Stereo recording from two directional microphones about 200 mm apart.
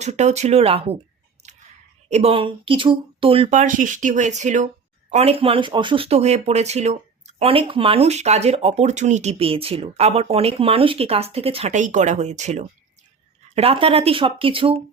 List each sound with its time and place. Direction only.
0.0 s speech: 35° right (ahead or behind)
2.0 s speech: 30° right (ahead or behind)